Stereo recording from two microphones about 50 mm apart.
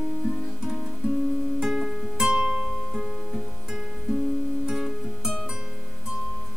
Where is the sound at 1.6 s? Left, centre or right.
Centre.